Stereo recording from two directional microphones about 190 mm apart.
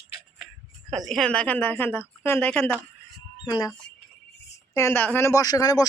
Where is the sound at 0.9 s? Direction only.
Centre (ahead or behind).